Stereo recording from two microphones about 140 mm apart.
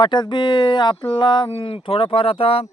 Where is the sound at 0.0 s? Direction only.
35° left (ahead or behind).